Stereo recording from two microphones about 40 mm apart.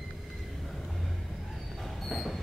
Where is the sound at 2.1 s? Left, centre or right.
Centre.